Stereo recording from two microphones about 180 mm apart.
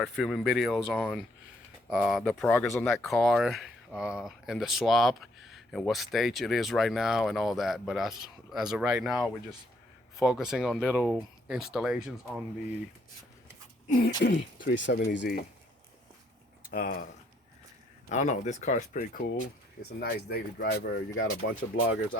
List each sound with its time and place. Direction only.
0.0 s speech: centre (ahead or behind)
14.2 s speech: 65° left (ahead or behind); by 15.4 s 80° left
16.6 s speech: 55° left (ahead or behind)
18.1 s speech: 40° left (ahead or behind)
20.0 s speech: 65° left (ahead or behind); by 21.6 s 80° left